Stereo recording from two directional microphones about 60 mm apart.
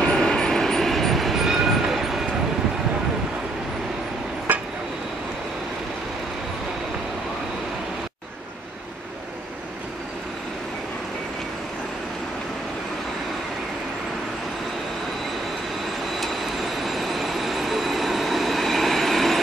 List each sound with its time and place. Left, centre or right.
0.0 s vehicle: centre
4.5 s a sound: right
16.2 s jet engine: centre